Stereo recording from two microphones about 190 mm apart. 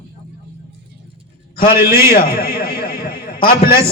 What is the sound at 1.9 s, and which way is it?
A man's voice, 50° left (ahead or behind).